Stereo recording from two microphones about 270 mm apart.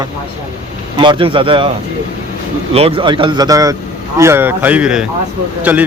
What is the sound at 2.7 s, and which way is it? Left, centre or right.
Speech, right.